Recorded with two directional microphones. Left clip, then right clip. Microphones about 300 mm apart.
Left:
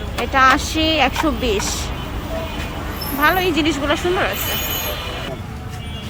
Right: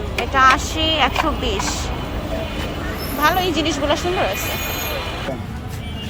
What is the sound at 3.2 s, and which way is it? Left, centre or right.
Speech, centre.